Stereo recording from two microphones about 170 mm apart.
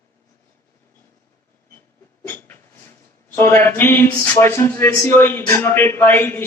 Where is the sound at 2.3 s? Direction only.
10° left (ahead or behind).